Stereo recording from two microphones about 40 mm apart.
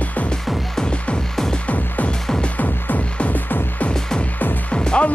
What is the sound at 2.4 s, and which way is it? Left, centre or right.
Music, left.